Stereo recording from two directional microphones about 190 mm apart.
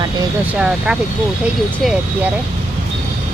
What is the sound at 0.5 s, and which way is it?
Speech, 5° right (ahead or behind).